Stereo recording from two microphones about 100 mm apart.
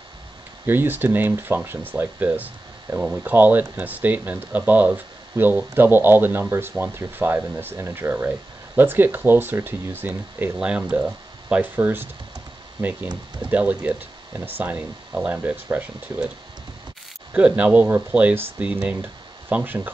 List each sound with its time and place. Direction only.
0.7 s speech: 20° right (ahead or behind)
13.5 s speech: 15° right (ahead or behind)
17.3 s speech: 15° right (ahead or behind)